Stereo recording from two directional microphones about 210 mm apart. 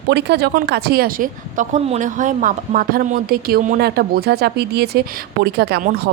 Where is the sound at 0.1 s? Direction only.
55° right (ahead or behind).